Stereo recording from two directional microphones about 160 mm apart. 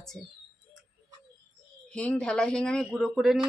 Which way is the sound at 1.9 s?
5° left (ahead or behind).